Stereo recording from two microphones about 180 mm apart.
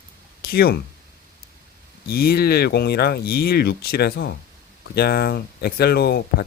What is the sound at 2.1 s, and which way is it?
Speech, 60° left (ahead or behind).